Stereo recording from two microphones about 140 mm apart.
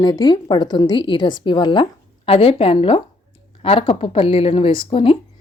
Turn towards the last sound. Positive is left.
turn(degrees=40)  # may be behind; listen again after turning